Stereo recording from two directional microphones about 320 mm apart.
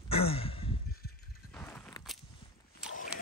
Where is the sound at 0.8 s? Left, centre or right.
Left.